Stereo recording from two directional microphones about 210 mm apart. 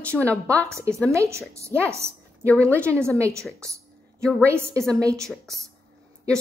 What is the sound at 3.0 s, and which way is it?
Speech, 15° right (ahead or behind).